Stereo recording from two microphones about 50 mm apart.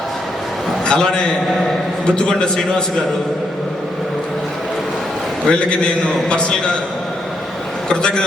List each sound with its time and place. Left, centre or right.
0.9 s a man's voice: centre
5.5 s a man's voice: left
7.9 s a man's voice: centre